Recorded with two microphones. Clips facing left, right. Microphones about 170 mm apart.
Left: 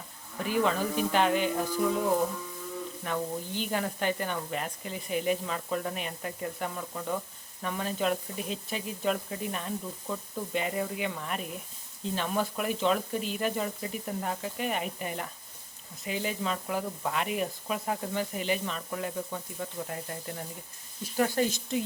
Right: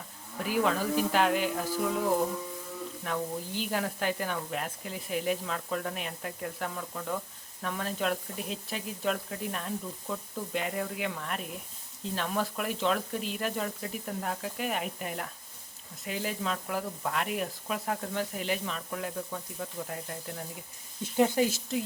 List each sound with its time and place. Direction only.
0.3 s speech: 5° right (ahead or behind)
21.0 s speech: 20° right (ahead or behind)
21.4 s speech: 5° right (ahead or behind)